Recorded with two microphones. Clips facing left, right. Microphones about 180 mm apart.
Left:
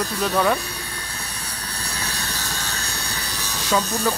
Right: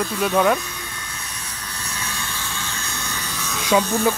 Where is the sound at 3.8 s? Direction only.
35° left (ahead or behind).